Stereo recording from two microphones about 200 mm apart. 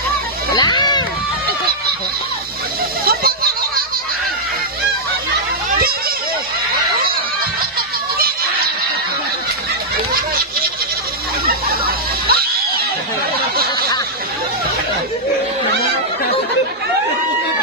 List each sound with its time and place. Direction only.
0.6 s run: 20° left (ahead or behind)
3.1 s a sound: 50° right (ahead or behind)
11.8 s music: 50° right (ahead or behind)